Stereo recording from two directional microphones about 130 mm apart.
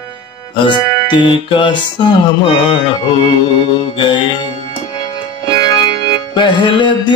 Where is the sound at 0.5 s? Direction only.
40° left (ahead or behind).